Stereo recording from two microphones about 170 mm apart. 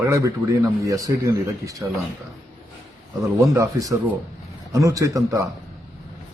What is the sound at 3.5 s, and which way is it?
A man's voice, 20° right (ahead or behind).